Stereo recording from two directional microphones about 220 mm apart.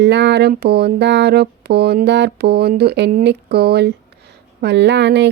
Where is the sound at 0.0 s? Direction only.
50° right (ahead or behind).